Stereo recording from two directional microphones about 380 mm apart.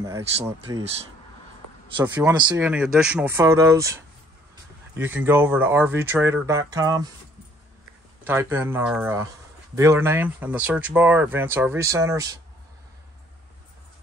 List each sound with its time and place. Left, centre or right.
0.0 s speech: centre
2.0 s speech: centre
8.2 s speech: centre